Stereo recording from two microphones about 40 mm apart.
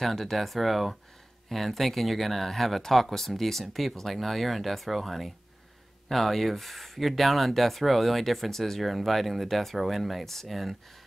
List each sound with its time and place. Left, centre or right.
0.0 s speech: centre